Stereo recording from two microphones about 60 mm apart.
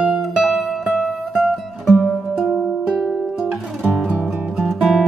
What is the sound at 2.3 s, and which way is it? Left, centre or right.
Music, right.